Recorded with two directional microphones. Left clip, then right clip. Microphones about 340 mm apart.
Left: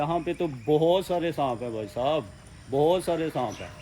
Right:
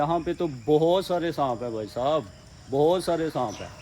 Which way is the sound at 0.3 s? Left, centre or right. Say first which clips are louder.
Right 1 dB; centre.